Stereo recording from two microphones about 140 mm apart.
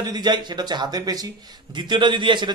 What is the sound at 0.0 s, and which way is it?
A man's voice, 30° right (ahead or behind).